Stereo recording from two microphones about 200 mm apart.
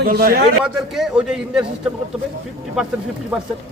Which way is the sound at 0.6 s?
5° right (ahead or behind).